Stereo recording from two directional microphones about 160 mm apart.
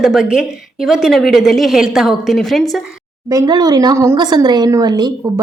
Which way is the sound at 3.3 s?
25° right (ahead or behind).